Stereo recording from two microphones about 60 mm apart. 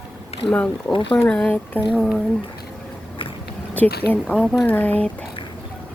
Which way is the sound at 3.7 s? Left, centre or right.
Left.